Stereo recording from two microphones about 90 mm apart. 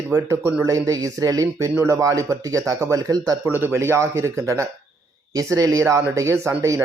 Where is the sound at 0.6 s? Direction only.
40° right (ahead or behind).